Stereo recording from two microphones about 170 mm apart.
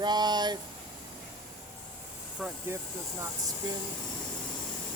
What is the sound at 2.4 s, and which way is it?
Speech, centre (ahead or behind).